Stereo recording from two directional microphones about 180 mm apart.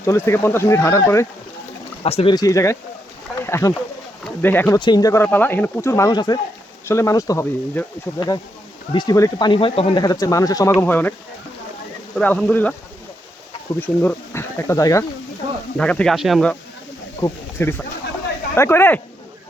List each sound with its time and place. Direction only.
0.0 s speech: 15° left (ahead or behind)
2.0 s speech: 35° left (ahead or behind)
2.3 s speech: 20° left (ahead or behind)
4.8 s speech: 25° left (ahead or behind)
12.1 s speech: 5° left (ahead or behind)
13.7 s speech: 10° left (ahead or behind)
15.8 s speech: 5° left (ahead or behind)
17.2 s speech: 15° left (ahead or behind)